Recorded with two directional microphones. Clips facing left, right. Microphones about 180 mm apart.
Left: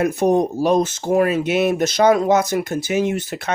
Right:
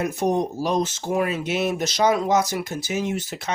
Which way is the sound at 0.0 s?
55° left (ahead or behind).